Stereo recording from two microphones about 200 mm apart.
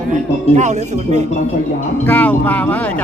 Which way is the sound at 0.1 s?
35° right (ahead or behind).